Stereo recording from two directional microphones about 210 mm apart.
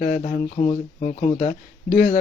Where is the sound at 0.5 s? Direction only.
25° left (ahead or behind).